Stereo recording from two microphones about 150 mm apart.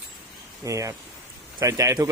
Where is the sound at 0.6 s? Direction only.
20° right (ahead or behind).